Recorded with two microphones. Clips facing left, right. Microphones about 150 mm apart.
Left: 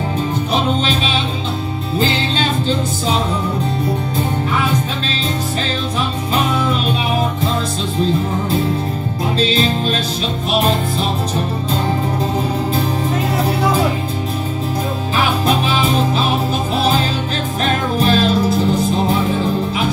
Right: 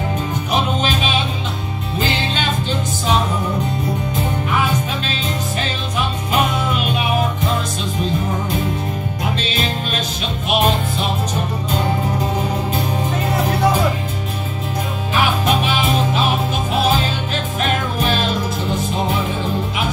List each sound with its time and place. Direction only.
2.0 s music: 35° left (ahead or behind)
6.3 s music: 30° left (ahead or behind)
9.4 s music: 30° left (ahead or behind)
15.4 s music: 35° left (ahead or behind)
17.9 s music: 35° left (ahead or behind)